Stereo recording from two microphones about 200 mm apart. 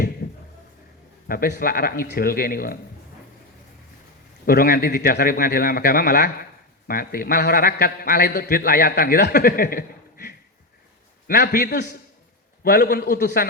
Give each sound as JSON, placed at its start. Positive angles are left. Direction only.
{"t": 0.2, "sound": "a sound", "side_deg": 55}
{"t": 1.3, "sound": "a man's voice", "side_deg": 50}
{"t": 4.4, "sound": "a man's voice", "side_deg": 45}